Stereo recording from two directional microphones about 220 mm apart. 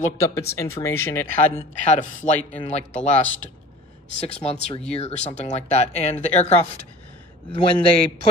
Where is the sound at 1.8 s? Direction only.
35° left (ahead or behind).